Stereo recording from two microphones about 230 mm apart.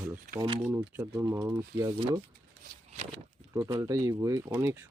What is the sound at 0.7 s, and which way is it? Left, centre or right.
Speech, centre.